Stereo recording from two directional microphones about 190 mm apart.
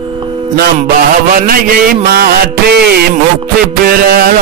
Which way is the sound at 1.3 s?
50° right (ahead or behind).